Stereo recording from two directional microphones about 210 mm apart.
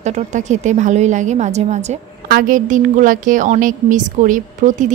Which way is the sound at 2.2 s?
45° right (ahead or behind).